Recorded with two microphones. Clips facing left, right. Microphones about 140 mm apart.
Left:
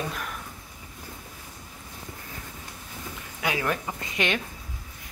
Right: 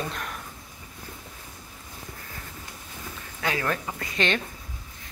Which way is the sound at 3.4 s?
15° left (ahead or behind).